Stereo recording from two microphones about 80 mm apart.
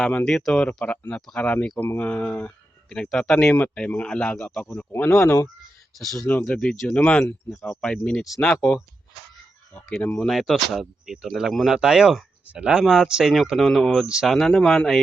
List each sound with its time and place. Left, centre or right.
0.0 s speech: centre
0.3 s speech: centre
4.9 s speech: left
5.9 s speech: centre
7.5 s speech: centre
9.9 s speech: centre
10.2 s speech: centre
12.8 s speech: centre